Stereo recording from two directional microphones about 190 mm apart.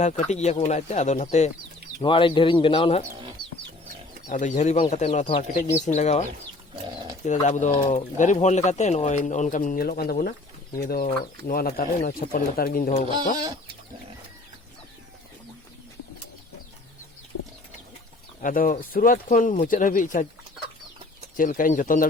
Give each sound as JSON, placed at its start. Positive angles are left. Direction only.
{"t": 0.0, "sound": "speech", "side_deg": 40}
{"t": 2.0, "sound": "speech", "side_deg": 25}
{"t": 4.3, "sound": "speech", "side_deg": 40}
{"t": 7.4, "sound": "speech", "side_deg": 40}
{"t": 18.4, "sound": "speech", "side_deg": 45}
{"t": 21.3, "sound": "speech", "side_deg": 45}